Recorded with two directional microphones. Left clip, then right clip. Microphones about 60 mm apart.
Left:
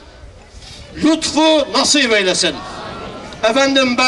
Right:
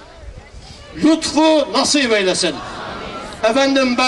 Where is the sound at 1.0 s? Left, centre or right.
Centre.